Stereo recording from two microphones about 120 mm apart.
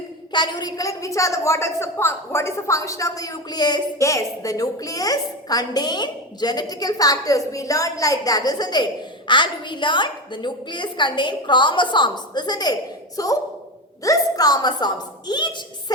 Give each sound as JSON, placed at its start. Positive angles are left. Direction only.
{"t": 0.3, "sound": "a woman's voice", "side_deg": 35}